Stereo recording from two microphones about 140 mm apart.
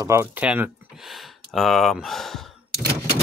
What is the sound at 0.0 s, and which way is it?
Speech, 20° right (ahead or behind).